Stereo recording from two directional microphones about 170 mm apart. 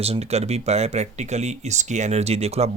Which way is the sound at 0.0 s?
35° right (ahead or behind).